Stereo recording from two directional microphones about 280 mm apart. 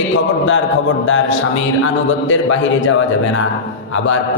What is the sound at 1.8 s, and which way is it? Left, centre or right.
A man's voice, left.